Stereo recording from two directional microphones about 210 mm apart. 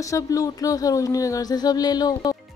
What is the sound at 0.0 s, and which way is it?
Speech, 15° left (ahead or behind).